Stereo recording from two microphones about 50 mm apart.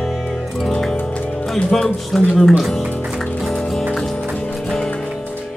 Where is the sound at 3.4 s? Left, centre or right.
Centre.